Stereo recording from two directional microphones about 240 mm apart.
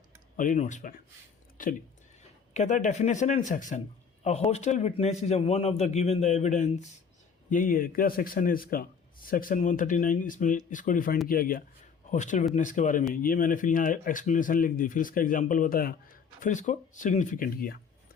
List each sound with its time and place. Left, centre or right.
0.3 s a man's voice: left
2.5 s a man's voice: left